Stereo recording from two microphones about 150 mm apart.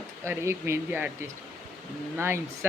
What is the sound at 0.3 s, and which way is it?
Speech, 20° right (ahead or behind).